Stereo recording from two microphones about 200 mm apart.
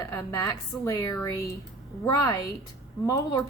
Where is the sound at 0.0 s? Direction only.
15° left (ahead or behind).